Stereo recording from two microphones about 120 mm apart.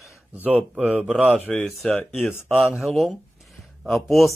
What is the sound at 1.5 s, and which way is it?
Speech, centre (ahead or behind).